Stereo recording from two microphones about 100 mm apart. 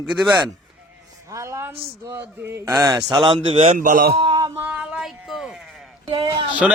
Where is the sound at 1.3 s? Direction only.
30° right (ahead or behind).